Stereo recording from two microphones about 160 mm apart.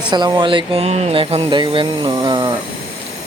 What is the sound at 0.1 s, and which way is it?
Speech, 25° right (ahead or behind).